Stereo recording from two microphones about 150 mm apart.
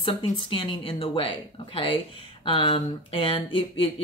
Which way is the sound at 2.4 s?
35° left (ahead or behind).